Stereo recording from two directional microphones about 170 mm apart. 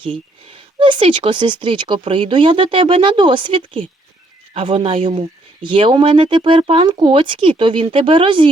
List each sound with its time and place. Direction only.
0.0 s speech: 30° right (ahead or behind)